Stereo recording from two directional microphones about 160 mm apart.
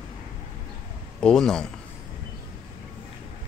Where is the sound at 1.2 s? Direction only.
5° left (ahead or behind).